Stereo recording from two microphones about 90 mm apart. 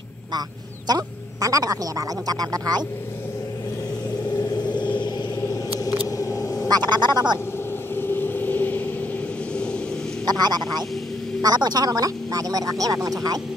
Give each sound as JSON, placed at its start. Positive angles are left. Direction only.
{"t": 0.8, "sound": "speech", "side_deg": -45}
{"t": 6.0, "sound": "a sound", "side_deg": 40}
{"t": 6.7, "sound": "speech", "side_deg": -55}
{"t": 7.9, "sound": "vehicle", "side_deg": 25}
{"t": 9.5, "sound": "a sound", "side_deg": 10}
{"t": 10.2, "sound": "speech", "side_deg": -50}